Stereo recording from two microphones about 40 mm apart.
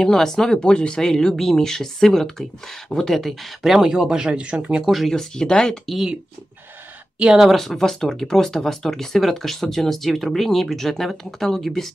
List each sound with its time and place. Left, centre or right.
0.0 s speech: centre
0.6 s speech: left; by 3.5 s centre
3.6 s speech: centre
4.8 s speech: centre
5.1 s speech: centre
7.4 s speech: centre